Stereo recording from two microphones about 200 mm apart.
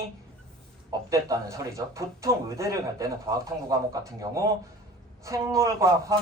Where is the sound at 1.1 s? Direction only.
15° right (ahead or behind).